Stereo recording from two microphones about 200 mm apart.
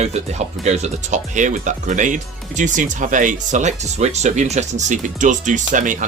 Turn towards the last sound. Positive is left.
turn(degrees=-40)  # may be behind; listen again after turning